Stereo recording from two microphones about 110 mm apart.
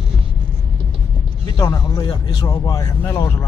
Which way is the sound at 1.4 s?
30° left (ahead or behind).